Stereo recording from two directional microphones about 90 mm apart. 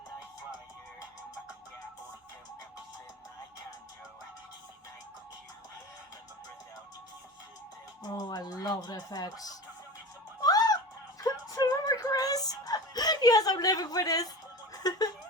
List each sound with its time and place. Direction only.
8.2 s speech: 45° left (ahead or behind)
10.4 s music: 45° left (ahead or behind)
11.2 s whimper: 45° left (ahead or behind)
14.7 s a sound: 45° left (ahead or behind)